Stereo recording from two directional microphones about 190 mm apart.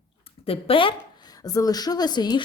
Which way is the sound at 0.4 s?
30° left (ahead or behind).